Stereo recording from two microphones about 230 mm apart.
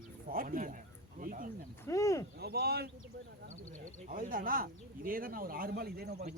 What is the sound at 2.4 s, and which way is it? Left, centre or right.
Speech, right.